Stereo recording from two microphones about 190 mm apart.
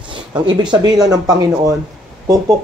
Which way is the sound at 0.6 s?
25° right (ahead or behind).